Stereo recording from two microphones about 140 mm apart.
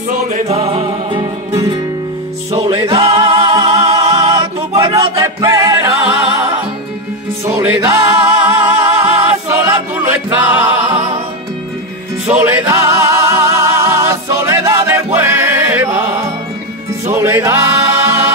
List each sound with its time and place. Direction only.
0.2 s music: 50° right (ahead or behind)
4.3 s music: 20° right (ahead or behind)
7.4 s music: 20° right (ahead or behind)
10.9 s music: 55° right (ahead or behind)
12.3 s music: 20° right (ahead or behind)